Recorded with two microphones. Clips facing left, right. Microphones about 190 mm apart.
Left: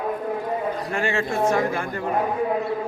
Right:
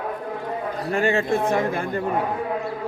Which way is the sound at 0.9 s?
35° right (ahead or behind).